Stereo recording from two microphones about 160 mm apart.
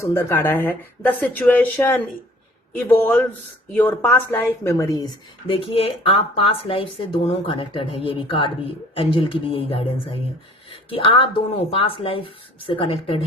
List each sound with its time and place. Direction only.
0.0 s speech: 15° left (ahead or behind)
5.5 s speech: 35° left (ahead or behind)